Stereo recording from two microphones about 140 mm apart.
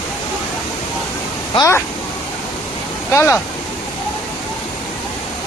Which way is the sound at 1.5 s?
20° left (ahead or behind).